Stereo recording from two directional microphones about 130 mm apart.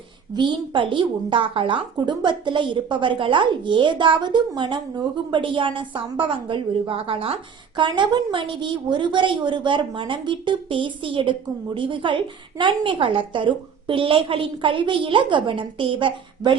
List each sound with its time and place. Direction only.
0.3 s a woman's voice: 35° right (ahead or behind)
7.8 s a woman's voice: 35° right (ahead or behind)